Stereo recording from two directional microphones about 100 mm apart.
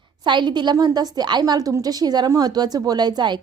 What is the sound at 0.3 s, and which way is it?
A woman's voice, 50° right (ahead or behind).